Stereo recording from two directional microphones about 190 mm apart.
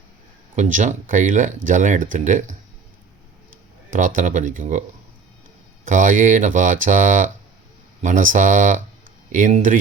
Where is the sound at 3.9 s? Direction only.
45° right (ahead or behind).